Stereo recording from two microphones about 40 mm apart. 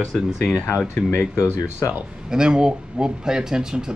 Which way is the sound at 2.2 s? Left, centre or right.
Right.